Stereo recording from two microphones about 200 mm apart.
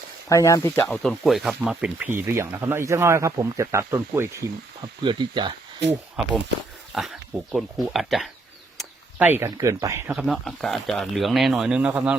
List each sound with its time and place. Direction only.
0.3 s speech: 15° left (ahead or behind)
0.9 s speech: centre (ahead or behind); by 5.5 s 20° right (ahead or behind)
6.9 s speech: centre (ahead or behind)
10.1 s speech: centre (ahead or behind)